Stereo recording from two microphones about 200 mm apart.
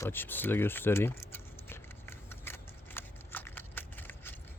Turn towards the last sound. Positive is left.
turn(degrees=10)  # may be behind; listen again after turning